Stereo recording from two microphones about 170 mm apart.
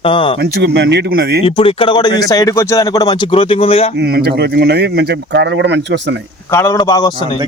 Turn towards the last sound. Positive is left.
turn(degrees=25)  # may be behind; listen again after turning